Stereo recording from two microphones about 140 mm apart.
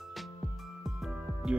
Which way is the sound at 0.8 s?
Centre (ahead or behind).